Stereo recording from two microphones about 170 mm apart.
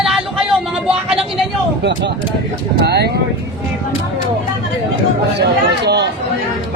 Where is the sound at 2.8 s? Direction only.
70° right (ahead or behind).